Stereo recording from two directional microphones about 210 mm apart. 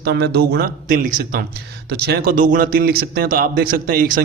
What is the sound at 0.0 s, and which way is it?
A man's voice, 50° right (ahead or behind).